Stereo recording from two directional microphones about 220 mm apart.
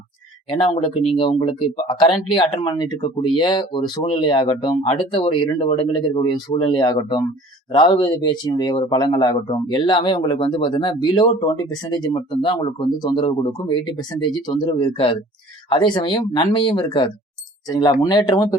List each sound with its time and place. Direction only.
1.0 s speech: 25° left (ahead or behind)